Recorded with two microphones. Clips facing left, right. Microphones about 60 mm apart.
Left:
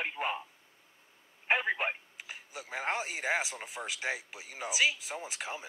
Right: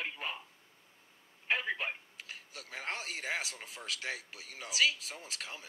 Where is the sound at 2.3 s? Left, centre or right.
Centre.